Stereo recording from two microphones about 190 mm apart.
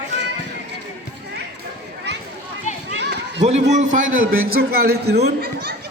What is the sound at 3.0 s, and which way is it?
Children playing, 65° right (ahead or behind).